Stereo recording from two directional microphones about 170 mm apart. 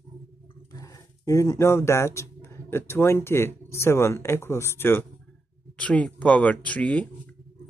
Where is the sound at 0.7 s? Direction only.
20° left (ahead or behind).